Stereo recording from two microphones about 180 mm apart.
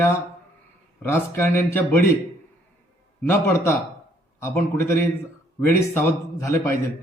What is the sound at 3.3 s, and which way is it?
A man's voice, 15° left (ahead or behind).